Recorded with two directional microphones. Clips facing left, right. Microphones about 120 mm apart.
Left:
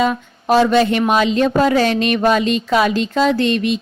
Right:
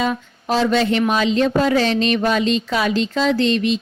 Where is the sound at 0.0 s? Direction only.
55° left (ahead or behind).